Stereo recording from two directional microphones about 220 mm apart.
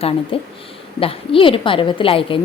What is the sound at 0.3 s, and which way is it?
A woman's voice, 25° left (ahead or behind).